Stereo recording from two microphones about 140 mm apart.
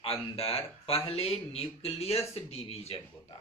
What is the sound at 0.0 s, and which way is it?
Speech, 45° left (ahead or behind).